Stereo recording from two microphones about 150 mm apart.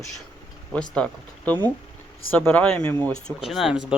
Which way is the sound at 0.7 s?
5° left (ahead or behind).